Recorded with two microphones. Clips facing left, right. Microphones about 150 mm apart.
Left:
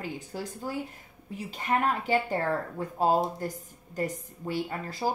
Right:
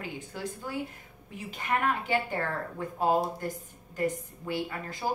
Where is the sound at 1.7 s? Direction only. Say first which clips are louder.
Left 2 dB; 30° left (ahead or behind).